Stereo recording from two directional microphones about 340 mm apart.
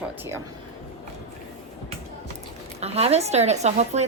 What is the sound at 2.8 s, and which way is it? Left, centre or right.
A woman's voice, centre.